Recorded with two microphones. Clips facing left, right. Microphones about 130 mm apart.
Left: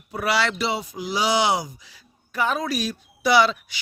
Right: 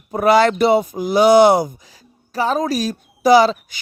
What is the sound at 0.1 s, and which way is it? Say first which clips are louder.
Speech: right 10 dB; 45° right (ahead or behind).